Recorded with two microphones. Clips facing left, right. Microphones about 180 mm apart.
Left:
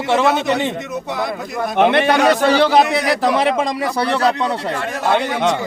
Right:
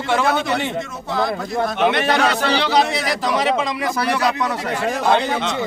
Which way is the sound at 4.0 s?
30° left (ahead or behind).